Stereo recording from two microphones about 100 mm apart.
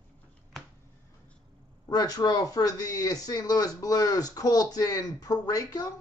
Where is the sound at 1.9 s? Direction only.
40° left (ahead or behind).